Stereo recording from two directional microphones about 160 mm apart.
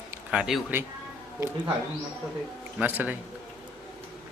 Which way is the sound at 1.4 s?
15° right (ahead or behind).